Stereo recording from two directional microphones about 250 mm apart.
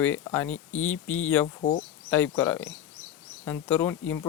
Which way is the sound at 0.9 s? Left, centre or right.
Left.